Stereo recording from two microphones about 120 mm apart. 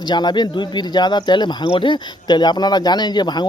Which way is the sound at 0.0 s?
40° left (ahead or behind).